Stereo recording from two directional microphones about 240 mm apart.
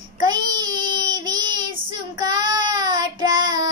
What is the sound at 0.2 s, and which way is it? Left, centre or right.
Child singing, centre.